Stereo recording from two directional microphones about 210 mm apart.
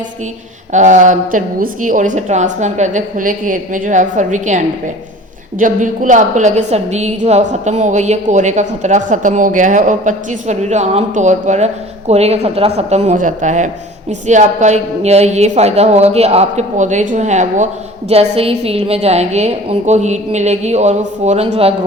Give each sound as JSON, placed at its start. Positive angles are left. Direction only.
{"t": 0.7, "sound": "a woman's voice", "side_deg": -35}